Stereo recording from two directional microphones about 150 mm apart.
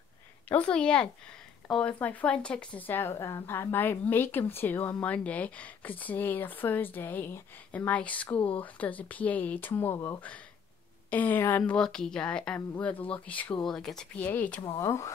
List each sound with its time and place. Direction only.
0.5 s speech: 10° left (ahead or behind)
14.6 s speech: 25° left (ahead or behind)